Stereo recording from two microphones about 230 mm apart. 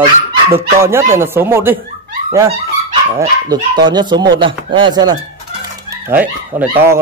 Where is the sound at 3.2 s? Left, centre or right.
Centre.